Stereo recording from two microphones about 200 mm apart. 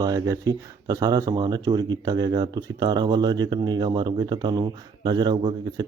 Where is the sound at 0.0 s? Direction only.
20° right (ahead or behind).